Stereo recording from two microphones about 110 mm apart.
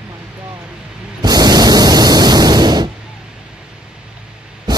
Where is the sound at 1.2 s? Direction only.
35° right (ahead or behind).